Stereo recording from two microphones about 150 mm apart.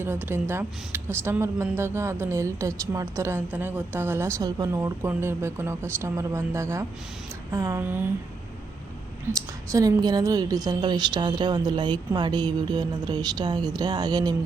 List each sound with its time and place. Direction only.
0.0 s a woman's voice: 15° right (ahead or behind)
9.2 s a woman's voice: 20° right (ahead or behind)